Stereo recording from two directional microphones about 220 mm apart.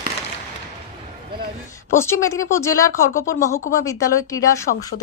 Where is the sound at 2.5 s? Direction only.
15° left (ahead or behind).